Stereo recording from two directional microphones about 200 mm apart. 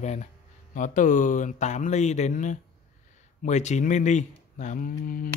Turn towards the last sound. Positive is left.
turn(degrees=45)  # may be behind; listen again after turning